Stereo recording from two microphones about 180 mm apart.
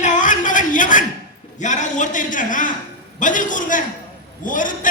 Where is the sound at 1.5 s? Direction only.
45° left (ahead or behind).